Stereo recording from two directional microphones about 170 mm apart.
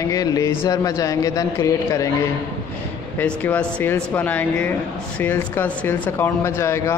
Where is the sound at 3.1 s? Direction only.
10° left (ahead or behind).